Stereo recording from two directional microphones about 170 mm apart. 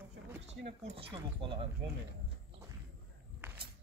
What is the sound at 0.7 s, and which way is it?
Speech, 35° right (ahead or behind).